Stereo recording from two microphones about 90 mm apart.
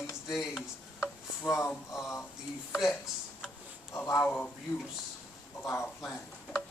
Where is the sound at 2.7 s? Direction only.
5° right (ahead or behind).